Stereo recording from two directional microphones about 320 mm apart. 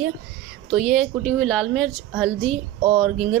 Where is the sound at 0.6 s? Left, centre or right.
Centre.